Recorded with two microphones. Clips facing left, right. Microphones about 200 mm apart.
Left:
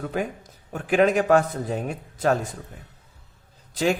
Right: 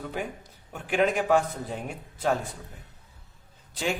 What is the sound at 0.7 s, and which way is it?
A man's voice, 40° left (ahead or behind).